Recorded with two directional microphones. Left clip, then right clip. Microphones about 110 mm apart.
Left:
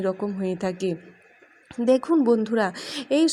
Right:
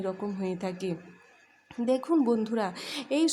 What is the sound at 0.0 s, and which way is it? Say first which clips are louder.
Speech: left 6 dB; 30° left (ahead or behind).